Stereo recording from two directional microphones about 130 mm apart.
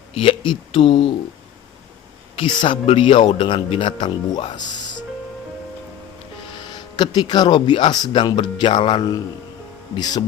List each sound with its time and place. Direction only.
0.1 s speech: 45° left (ahead or behind)
2.4 s speech: 40° left (ahead or behind)
6.5 s speech: 35° left (ahead or behind)